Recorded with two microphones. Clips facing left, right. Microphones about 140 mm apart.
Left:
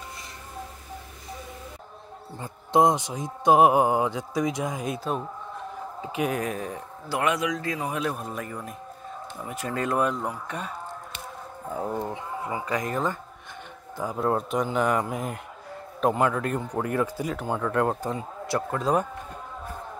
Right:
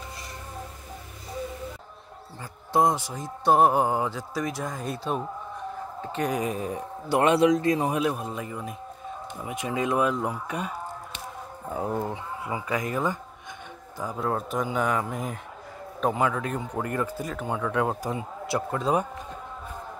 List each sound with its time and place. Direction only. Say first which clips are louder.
2.4 s speech: left 2 dB; 20° left (ahead or behind)
3.4 s music: left 2 dB; 10° left (ahead or behind)
4.6 s speech: left 1 dB; 5° left (ahead or behind)
7.2 s a man's voice: right 6 dB; 30° right (ahead or behind)
8.0 s speech: right 2 dB; 10° right (ahead or behind)
11.7 s speech: right 1 dB; 5° right (ahead or behind)
13.9 s a man's voice: left 2 dB; 10° left (ahead or behind)
14.2 s speech: left 3 dB; centre (ahead or behind)
16.9 s speech: left 3 dB; 10° left (ahead or behind)